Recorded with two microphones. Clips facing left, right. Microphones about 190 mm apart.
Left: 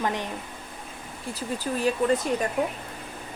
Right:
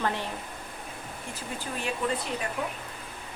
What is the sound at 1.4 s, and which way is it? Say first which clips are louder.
Speech: left 8 dB; 40° left (ahead or behind).